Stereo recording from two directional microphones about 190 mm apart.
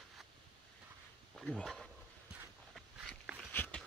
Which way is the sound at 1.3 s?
5° left (ahead or behind).